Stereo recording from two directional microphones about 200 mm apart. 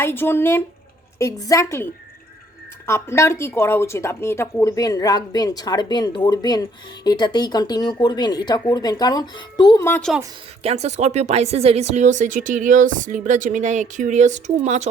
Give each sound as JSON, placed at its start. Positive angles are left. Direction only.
{"t": 0.0, "sound": "a woman's voice", "side_deg": 10}
{"t": 10.6, "sound": "speech", "side_deg": -30}